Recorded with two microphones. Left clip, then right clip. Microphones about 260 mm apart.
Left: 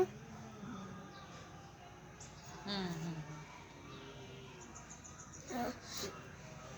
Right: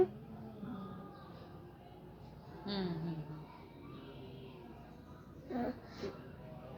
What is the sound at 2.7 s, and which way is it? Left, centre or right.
Speech, left.